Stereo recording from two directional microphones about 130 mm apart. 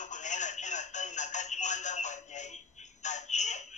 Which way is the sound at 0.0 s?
70° left (ahead or behind).